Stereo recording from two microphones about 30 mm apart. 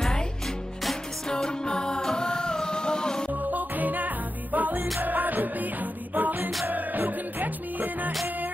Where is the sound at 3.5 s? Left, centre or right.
Right.